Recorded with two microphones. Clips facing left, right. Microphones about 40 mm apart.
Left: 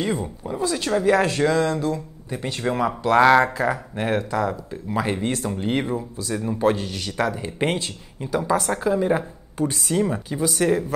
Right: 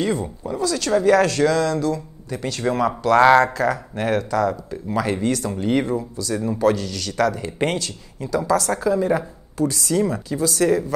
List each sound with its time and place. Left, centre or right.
0.0 s speech: left
2.6 s speech: centre